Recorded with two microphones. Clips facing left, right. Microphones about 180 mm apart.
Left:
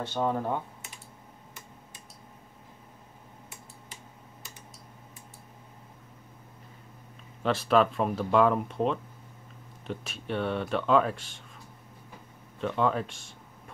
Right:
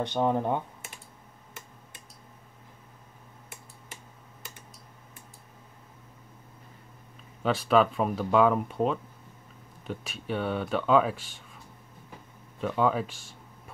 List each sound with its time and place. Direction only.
0.0 s speech: 15° right (ahead or behind)
7.4 s speech: centre (ahead or behind)
12.5 s speech: 5° right (ahead or behind)